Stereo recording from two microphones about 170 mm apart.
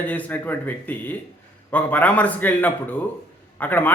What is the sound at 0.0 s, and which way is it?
A man's voice, 10° left (ahead or behind).